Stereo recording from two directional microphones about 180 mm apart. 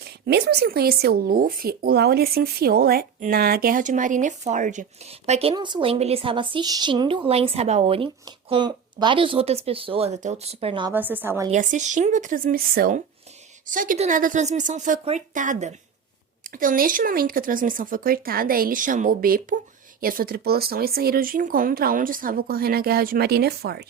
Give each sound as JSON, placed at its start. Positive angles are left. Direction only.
{"t": 0.3, "sound": "speech", "side_deg": -65}
{"t": 10.9, "sound": "a woman's voice", "side_deg": -10}
{"t": 11.5, "sound": "speech", "side_deg": -45}